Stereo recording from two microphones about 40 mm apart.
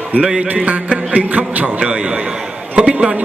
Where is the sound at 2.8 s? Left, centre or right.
Right.